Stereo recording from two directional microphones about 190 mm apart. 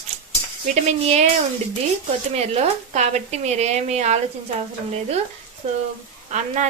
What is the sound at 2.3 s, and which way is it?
A woman's voice, 35° right (ahead or behind).